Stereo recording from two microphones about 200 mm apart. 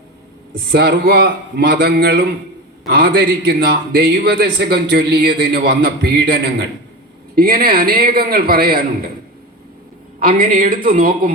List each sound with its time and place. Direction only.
0.5 s a man's voice: 50° right (ahead or behind)
10.2 s a man's voice: 45° right (ahead or behind)